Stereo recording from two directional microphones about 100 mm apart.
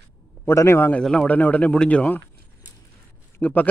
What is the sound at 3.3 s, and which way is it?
Speech, 15° left (ahead or behind).